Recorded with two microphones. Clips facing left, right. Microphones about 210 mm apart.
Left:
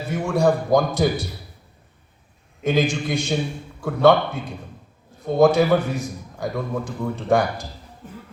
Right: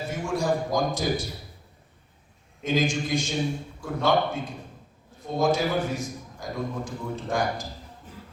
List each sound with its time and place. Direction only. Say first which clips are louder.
0.1 s a man's voice: left 7 dB; 60° left (ahead or behind)
2.6 s a man's voice: left 4 dB; 65° left (ahead or behind)
8.0 s music: left 11 dB; 55° left (ahead or behind)